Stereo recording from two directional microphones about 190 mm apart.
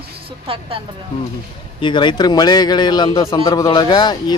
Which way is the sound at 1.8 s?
25° left (ahead or behind).